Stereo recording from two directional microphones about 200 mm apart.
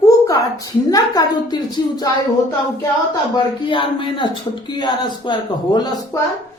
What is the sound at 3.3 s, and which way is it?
A woman's voice, 25° left (ahead or behind).